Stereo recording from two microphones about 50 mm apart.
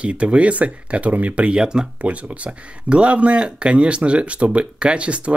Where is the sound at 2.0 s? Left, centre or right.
Right.